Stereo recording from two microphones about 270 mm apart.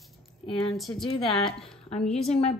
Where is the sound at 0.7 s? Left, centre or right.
Centre.